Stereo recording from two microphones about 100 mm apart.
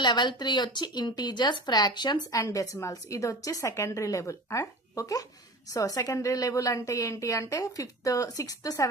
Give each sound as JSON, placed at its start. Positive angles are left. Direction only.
{"t": 0.0, "sound": "speech", "side_deg": 50}
{"t": 2.4, "sound": "a woman's voice", "side_deg": 35}